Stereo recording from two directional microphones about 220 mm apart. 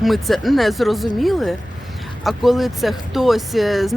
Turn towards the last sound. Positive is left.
turn(degrees=0)  # may be behind; listen again after turning